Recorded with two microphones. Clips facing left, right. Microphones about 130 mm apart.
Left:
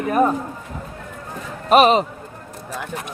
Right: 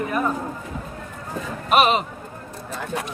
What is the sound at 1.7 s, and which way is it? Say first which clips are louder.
Speech: left 5 dB; 35° left (ahead or behind).